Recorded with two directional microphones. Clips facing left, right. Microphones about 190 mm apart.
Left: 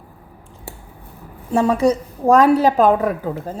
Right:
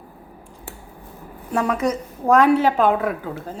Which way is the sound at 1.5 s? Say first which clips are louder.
Left 5 dB; 30° left (ahead or behind).